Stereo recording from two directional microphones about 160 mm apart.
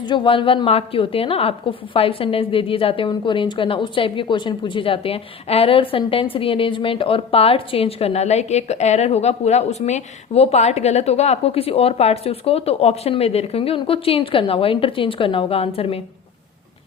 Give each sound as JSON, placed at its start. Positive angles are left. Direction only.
{"t": 0.1, "sound": "a woman's voice", "side_deg": 30}